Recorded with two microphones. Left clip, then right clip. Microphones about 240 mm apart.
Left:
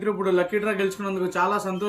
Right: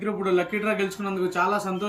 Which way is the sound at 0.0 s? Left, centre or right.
Centre.